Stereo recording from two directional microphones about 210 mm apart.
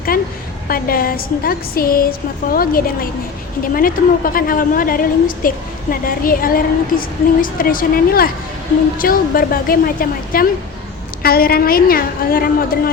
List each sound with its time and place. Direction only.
0.1 s a woman's voice: 45° left (ahead or behind)